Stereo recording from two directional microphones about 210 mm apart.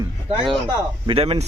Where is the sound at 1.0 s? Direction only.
25° right (ahead or behind).